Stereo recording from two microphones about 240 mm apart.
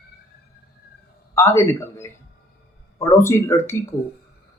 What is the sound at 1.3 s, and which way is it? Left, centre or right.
A man's voice, centre.